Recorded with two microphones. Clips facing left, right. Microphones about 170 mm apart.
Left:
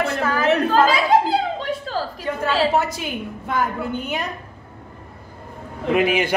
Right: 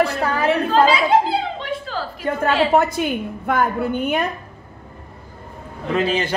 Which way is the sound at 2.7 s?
55° right (ahead or behind).